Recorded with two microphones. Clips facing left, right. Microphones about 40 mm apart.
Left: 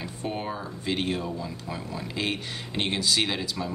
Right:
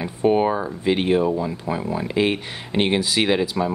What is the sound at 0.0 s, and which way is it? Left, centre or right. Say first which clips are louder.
Speech: right 14 dB; right.